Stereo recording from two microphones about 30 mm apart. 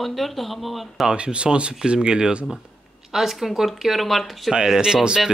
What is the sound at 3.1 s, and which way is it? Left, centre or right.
Speech, centre.